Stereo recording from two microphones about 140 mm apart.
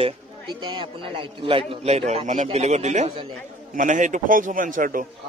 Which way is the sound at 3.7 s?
65° right (ahead or behind).